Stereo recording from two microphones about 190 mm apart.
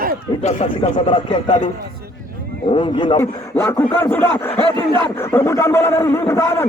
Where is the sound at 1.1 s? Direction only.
25° left (ahead or behind).